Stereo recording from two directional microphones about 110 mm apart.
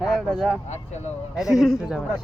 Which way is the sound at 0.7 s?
90° left.